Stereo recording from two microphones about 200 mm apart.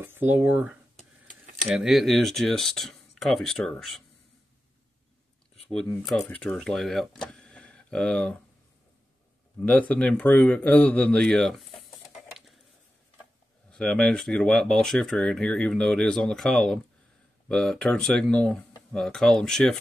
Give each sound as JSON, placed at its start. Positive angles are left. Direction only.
{"t": 0.0, "sound": "speech", "side_deg": -10}
{"t": 0.9, "sound": "a sound", "side_deg": -40}
{"t": 1.8, "sound": "speech", "side_deg": 0}
{"t": 6.0, "sound": "speech", "side_deg": 5}
{"t": 9.6, "sound": "speech", "side_deg": 5}
{"t": 13.7, "sound": "speech", "side_deg": 5}